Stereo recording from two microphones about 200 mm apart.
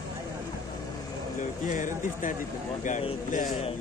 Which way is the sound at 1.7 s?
40° left (ahead or behind).